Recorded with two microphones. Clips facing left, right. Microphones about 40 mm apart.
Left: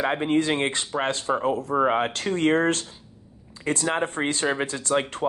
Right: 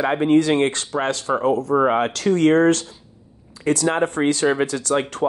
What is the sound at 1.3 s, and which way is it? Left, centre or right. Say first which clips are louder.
Speech: right 3 dB; centre.